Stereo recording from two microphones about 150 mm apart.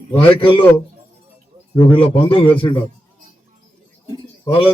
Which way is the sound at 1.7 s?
35° left (ahead or behind).